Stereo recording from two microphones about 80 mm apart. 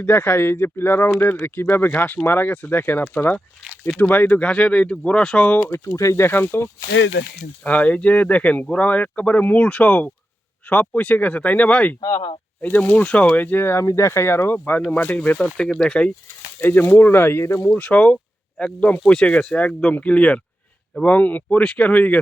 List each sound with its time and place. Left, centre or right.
0.0 s speech: left
5.8 s speech: left; by 11.9 s centre
11.9 s speech: left
12.6 s speech: left
15.4 s speech: centre
16.6 s speech: left
17.7 s speech: centre